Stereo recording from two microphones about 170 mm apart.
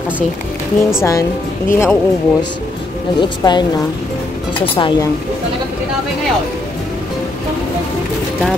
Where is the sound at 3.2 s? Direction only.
25° left (ahead or behind).